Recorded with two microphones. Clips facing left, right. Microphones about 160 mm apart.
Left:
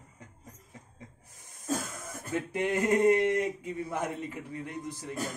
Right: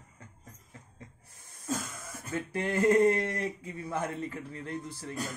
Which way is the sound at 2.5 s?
20° left (ahead or behind).